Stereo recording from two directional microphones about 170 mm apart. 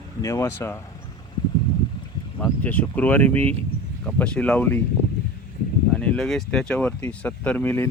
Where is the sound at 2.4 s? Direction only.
10° left (ahead or behind).